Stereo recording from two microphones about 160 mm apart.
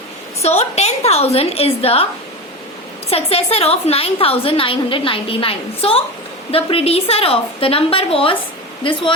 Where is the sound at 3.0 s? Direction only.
40° left (ahead or behind).